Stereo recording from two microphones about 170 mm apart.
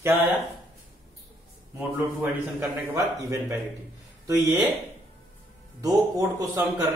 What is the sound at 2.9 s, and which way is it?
Speech, 15° right (ahead or behind).